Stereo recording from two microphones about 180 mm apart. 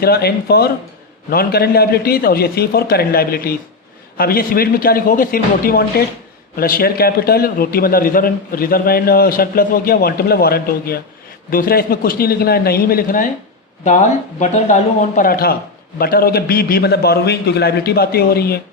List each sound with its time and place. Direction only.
0.0 s a man's voice: 60° left (ahead or behind)
13.8 s a man's voice: 40° left (ahead or behind); by 18.6 s 60° left (ahead or behind)